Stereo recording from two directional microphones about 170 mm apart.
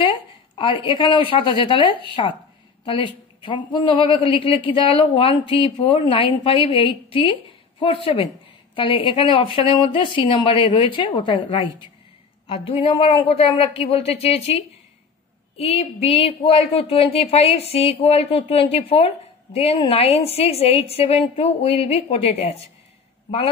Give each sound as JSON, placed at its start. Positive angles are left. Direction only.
{"t": 0.6, "sound": "a woman's voice", "side_deg": 30}
{"t": 15.5, "sound": "a woman's voice", "side_deg": 35}